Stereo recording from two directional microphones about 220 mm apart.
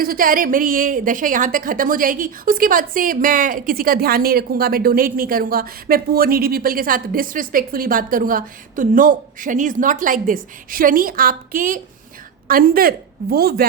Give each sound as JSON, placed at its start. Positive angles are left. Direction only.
{"t": 0.0, "sound": "a woman's voice", "side_deg": -40}